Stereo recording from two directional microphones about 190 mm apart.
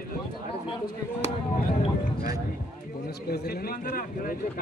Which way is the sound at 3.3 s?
55° left (ahead or behind).